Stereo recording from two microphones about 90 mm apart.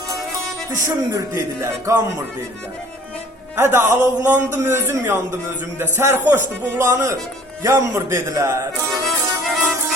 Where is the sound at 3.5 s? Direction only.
25° right (ahead or behind).